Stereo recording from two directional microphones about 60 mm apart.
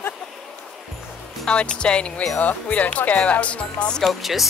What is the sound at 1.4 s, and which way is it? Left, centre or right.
Speech, centre.